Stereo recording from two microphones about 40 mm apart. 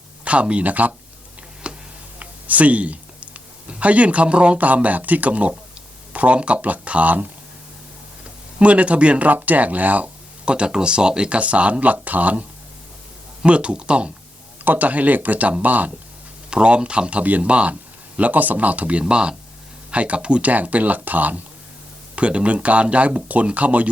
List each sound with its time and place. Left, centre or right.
0.3 s speech: right
1.6 s tick: right
2.1 s speech: right
8.5 s speech: right
10.4 s speech: right
13.4 s speech: right
14.6 s speech: right
16.5 s speech: right
18.2 s speech: right
20.5 s speech: right
22.1 s speech: right